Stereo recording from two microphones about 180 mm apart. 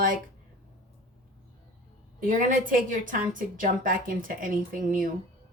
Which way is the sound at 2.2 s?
50° right (ahead or behind).